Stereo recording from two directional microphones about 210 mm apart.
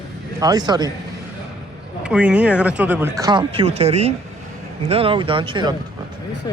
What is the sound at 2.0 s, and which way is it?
Speech, 5° right (ahead or behind).